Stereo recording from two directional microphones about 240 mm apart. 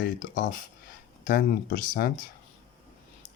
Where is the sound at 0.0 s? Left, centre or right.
Left.